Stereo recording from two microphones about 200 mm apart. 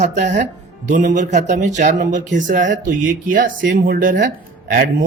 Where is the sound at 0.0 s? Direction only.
35° right (ahead or behind).